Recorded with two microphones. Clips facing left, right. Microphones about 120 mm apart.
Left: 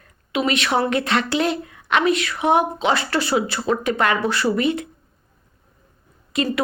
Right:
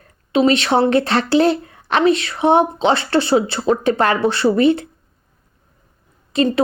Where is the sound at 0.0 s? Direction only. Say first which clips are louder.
Right 7 dB; 35° right (ahead or behind).